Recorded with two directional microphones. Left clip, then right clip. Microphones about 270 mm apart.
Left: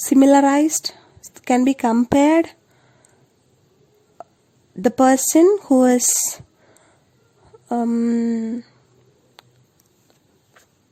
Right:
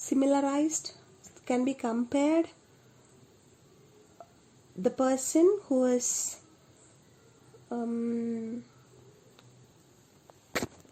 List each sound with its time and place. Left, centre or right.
0.0 s a woman's voice: left
4.8 s speech: left
7.7 s speech: left